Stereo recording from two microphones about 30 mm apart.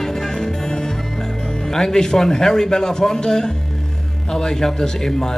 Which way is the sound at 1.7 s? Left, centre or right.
Centre.